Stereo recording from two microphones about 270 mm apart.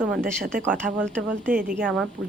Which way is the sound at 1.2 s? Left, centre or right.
Right.